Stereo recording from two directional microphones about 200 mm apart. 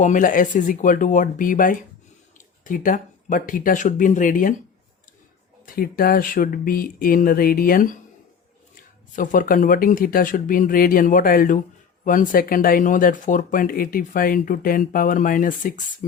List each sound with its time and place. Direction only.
0.0 s speech: 40° left (ahead or behind)
5.6 s speech: 45° left (ahead or behind)